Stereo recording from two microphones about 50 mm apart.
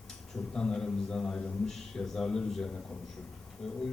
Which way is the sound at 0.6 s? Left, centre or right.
Centre.